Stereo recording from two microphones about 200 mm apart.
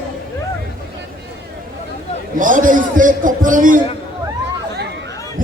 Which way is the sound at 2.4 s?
40° right (ahead or behind).